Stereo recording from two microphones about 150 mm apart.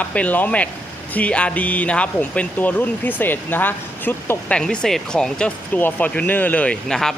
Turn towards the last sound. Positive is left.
turn(degrees=5)  # may be behind; listen again after turning